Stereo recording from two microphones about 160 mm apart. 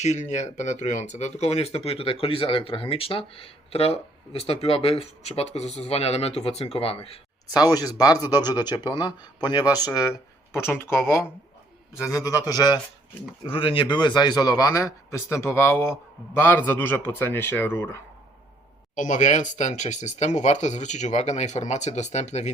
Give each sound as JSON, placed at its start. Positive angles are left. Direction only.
{"t": 0.0, "sound": "speech", "side_deg": 45}
{"t": 7.4, "sound": "speech", "side_deg": 25}
{"t": 12.0, "sound": "speech", "side_deg": 20}
{"t": 18.9, "sound": "speech", "side_deg": 50}